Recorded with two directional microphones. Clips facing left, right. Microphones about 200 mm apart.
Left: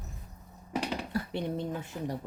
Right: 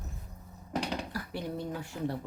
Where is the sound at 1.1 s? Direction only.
25° left (ahead or behind).